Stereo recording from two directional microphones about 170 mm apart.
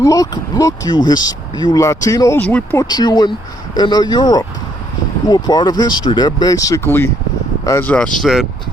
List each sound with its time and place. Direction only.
0.0 s speech: 20° left (ahead or behind)
2.9 s speech: 25° left (ahead or behind); by 8.1 s 10° left (ahead or behind)
8.2 s speech: 5° right (ahead or behind)